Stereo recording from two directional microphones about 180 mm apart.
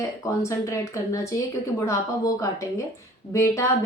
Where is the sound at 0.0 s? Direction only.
15° left (ahead or behind).